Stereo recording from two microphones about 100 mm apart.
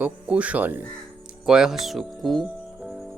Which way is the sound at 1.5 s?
5° right (ahead or behind).